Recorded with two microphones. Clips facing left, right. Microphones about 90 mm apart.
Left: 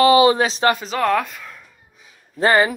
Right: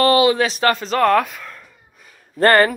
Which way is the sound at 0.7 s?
5° left (ahead or behind).